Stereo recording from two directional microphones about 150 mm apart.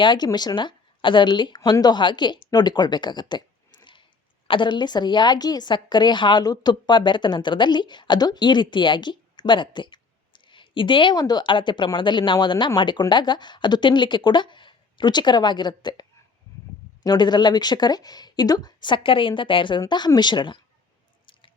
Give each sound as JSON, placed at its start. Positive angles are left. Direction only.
{"t": 0.0, "sound": "a woman's voice", "side_deg": 30}